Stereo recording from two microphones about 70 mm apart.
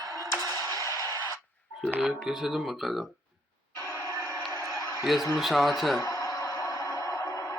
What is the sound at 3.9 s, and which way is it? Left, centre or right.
Music, left.